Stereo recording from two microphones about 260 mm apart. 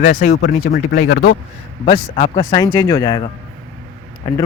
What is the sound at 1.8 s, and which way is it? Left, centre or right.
Speech, left.